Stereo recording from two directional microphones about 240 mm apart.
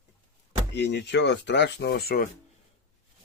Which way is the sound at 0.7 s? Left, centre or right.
Left.